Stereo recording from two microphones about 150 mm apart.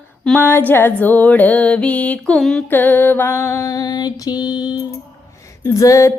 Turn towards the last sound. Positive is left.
turn(degrees=20)  # may be behind; listen again after turning